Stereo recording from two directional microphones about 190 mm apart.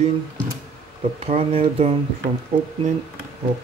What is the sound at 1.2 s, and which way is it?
Speech, 30° right (ahead or behind).